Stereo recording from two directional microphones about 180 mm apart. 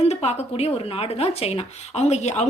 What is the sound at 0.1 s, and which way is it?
Speech, 35° left (ahead or behind).